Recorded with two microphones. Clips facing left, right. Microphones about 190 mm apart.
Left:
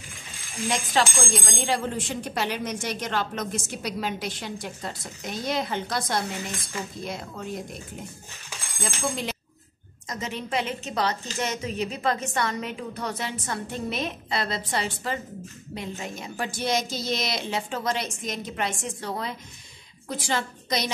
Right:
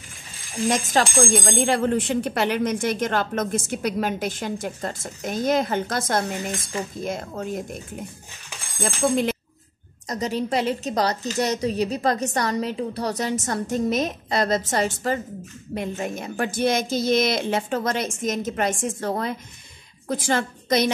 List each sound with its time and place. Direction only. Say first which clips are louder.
0.7 s speech: right 3 dB; 45° right (ahead or behind)
8.8 s speech: right 8 dB; 55° right (ahead or behind)
10.0 s a woman's voice: right 8 dB; 40° right (ahead or behind)